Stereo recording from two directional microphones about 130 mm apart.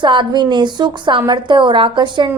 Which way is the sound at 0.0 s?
35° right (ahead or behind).